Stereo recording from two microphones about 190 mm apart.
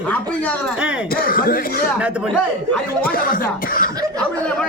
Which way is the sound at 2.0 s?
5° right (ahead or behind).